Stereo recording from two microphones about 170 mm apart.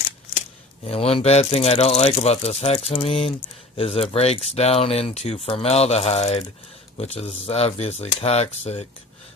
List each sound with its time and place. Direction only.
0.9 s speech: 35° left (ahead or behind)